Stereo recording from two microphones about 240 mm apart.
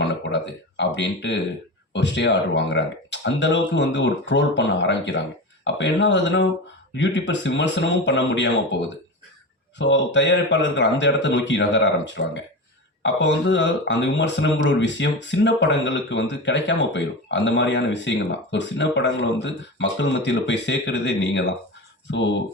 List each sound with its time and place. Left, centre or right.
0.0 s speech: left
9.7 s speech: left